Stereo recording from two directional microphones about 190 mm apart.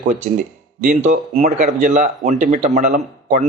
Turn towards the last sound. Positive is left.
turn(degrees=-40)  # may be behind; listen again after turning